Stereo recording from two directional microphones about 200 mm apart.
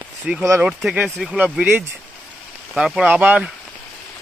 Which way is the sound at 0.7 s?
5° right (ahead or behind).